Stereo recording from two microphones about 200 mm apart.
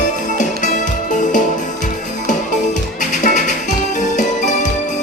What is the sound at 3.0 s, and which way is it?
Music, 40° left (ahead or behind).